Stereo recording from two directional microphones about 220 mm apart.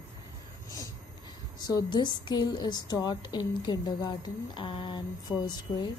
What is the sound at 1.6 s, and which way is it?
A woman's voice, 20° left (ahead or behind).